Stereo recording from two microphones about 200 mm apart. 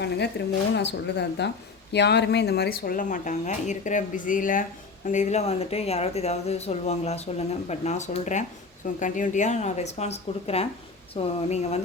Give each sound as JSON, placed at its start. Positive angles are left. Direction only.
{"t": 0.0, "sound": "a woman's voice", "side_deg": 55}